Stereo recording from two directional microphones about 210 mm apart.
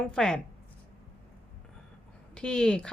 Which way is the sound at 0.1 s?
5° left (ahead or behind).